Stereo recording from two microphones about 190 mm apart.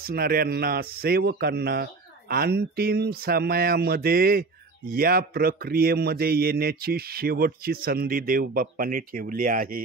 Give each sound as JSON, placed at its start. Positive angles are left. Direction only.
{"t": 0.0, "sound": "speech", "side_deg": -50}